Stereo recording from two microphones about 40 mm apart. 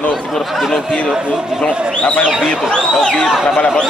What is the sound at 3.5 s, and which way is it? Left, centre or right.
Speech, left.